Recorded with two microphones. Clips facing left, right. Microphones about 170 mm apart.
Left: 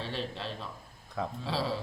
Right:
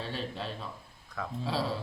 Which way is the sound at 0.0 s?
Centre (ahead or behind).